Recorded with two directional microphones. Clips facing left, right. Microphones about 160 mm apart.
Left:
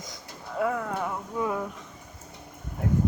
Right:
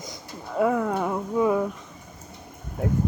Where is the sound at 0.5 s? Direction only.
20° right (ahead or behind).